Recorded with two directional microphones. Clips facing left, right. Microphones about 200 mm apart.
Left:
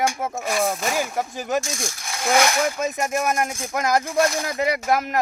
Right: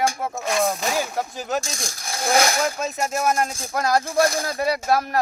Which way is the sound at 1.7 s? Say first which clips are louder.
Left 1 dB; 35° right (ahead or behind).